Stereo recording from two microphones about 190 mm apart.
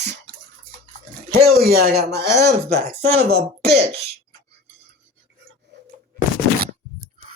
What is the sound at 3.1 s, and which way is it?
Speech, 60° right (ahead or behind).